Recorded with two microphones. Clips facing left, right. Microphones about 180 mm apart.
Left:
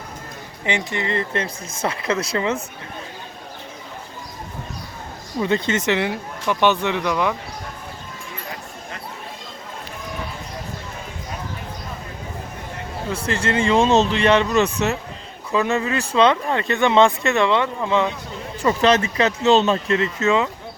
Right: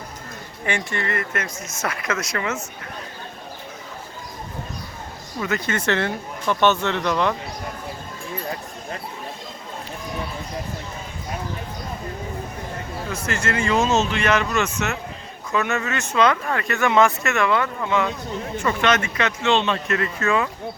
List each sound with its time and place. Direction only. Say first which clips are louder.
0.6 s speech: left 2 dB; 20° left (ahead or behind)
5.4 s speech: left 4 dB; 25° left (ahead or behind); by 7.3 s 5° left (ahead or behind)
13.1 s speech: left 3 dB; 30° left (ahead or behind)
19.9 s speech: left 3 dB; 25° left (ahead or behind)